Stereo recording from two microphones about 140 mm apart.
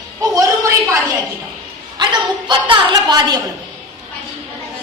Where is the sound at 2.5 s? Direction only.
35° right (ahead or behind).